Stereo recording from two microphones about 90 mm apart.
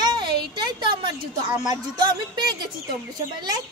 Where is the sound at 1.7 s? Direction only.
55° right (ahead or behind).